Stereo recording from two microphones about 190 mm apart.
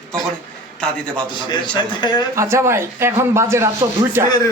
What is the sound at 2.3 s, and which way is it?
A man's voice, 15° right (ahead or behind).